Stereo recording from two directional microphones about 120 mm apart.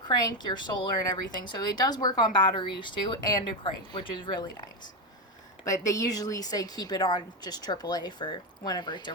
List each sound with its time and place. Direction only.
0.3 s a woman's voice: 35° left (ahead or behind)
5.6 s a woman's voice: 30° left (ahead or behind)